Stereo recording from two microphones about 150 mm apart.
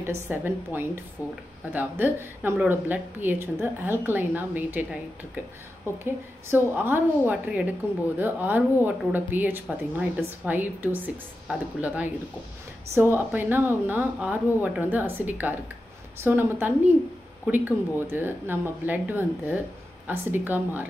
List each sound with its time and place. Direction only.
0.0 s speech: 15° right (ahead or behind)
1.2 s speech: 20° left (ahead or behind)
1.7 s speech: 10° right (ahead or behind)
6.0 s speech: 15° right (ahead or behind)